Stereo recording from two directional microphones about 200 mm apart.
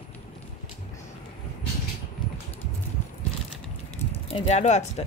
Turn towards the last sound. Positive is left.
turn(degrees=35)  # may be behind; listen again after turning